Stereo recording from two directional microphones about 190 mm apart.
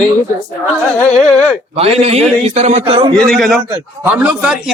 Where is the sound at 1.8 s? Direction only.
35° right (ahead or behind).